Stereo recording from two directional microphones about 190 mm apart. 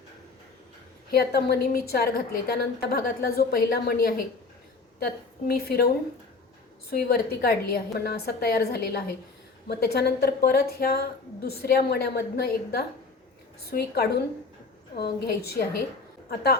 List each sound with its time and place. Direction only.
1.1 s a woman's voice: 55° left (ahead or behind)
6.9 s a woman's voice: 55° left (ahead or behind)